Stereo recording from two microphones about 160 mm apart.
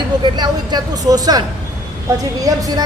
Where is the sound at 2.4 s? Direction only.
20° right (ahead or behind).